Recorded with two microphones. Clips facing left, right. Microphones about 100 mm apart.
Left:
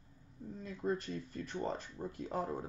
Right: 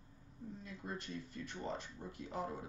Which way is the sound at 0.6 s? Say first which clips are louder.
Left 11 dB; 45° left (ahead or behind).